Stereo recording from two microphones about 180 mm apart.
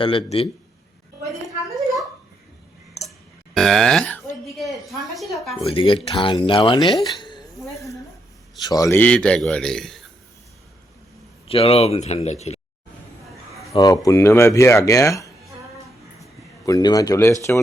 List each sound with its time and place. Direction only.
0.0 s speech: 30° left (ahead or behind)
1.7 s a sound: centre (ahead or behind)
3.5 s a man's voice: centre (ahead or behind)
5.7 s speech: 30° left (ahead or behind)
7.0 s a sound: 25° left (ahead or behind)
8.6 s a man's voice: 20° left (ahead or behind); by 10.0 s centre (ahead or behind)
11.4 s speech: 35° left (ahead or behind)
13.7 s speech: 20° left (ahead or behind)
16.6 s speech: 20° left (ahead or behind)